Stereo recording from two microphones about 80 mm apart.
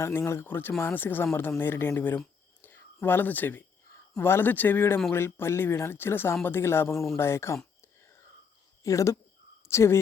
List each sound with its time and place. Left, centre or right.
0.0 s speech: left
8.8 s speech: left